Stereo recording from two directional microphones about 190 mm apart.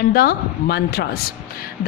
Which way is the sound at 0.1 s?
50° left (ahead or behind).